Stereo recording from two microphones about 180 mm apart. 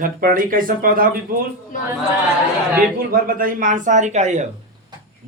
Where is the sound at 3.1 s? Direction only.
50° right (ahead or behind).